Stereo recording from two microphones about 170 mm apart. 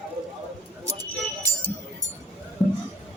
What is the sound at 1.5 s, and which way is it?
Music, 20° right (ahead or behind).